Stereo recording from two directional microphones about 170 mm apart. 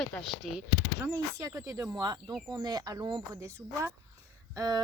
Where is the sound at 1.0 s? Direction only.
20° right (ahead or behind).